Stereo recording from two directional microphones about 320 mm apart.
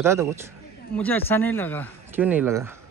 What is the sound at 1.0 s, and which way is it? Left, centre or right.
Speech, centre.